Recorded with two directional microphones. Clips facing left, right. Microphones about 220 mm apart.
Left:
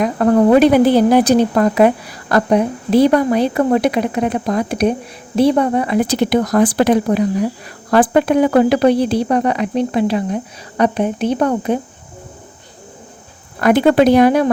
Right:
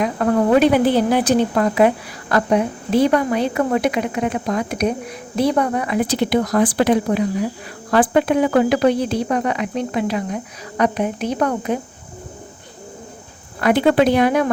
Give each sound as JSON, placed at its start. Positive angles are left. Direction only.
{"t": 0.0, "sound": "a woman's voice", "side_deg": 40}
{"t": 6.1, "sound": "speech", "side_deg": 45}
{"t": 13.6, "sound": "speech", "side_deg": 45}